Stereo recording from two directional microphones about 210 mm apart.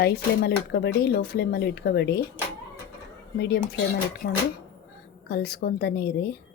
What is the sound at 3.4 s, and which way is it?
Speech, 50° left (ahead or behind).